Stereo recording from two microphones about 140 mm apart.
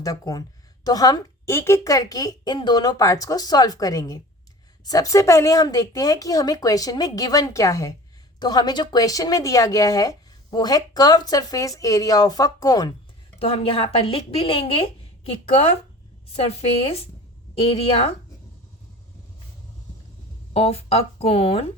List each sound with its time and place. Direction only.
0.0 s speech: 25° left (ahead or behind)
13.4 s speech: 45° left (ahead or behind)
20.5 s speech: 45° left (ahead or behind)